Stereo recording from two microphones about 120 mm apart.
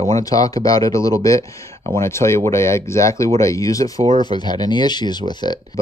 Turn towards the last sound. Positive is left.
turn(degrees=35)  # may be behind; listen again after turning